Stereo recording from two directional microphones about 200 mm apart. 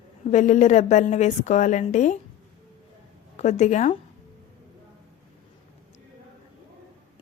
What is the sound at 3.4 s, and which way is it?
Speech, 35° left (ahead or behind).